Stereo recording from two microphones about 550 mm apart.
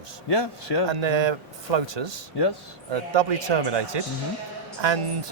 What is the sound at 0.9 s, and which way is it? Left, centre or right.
Speech, right.